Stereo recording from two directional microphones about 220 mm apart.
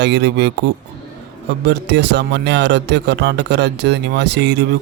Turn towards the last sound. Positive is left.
turn(degrees=-50)  # may be behind; listen again after turning